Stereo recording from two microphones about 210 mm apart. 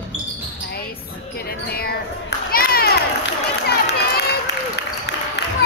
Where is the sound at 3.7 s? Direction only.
50° left (ahead or behind).